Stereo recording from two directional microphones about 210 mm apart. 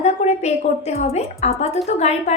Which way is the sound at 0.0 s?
30° left (ahead or behind).